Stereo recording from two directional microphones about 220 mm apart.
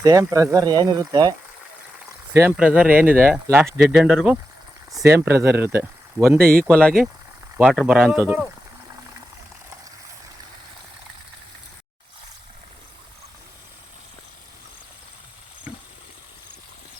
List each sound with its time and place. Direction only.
0.0 s speech: 15° right (ahead or behind)
6.4 s speech: 40° right (ahead or behind)
6.7 s speech: 5° left (ahead or behind)